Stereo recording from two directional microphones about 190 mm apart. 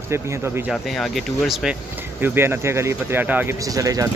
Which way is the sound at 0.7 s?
Centre (ahead or behind).